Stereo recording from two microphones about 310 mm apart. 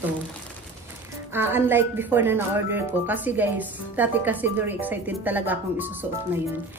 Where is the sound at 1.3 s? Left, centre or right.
Centre.